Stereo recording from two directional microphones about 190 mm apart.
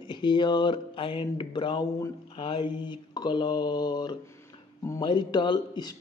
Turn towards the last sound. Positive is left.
turn(degrees=20)  # may be behind; listen again after turning